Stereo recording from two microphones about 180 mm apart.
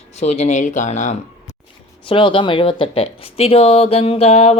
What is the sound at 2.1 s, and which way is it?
Speech, 30° left (ahead or behind).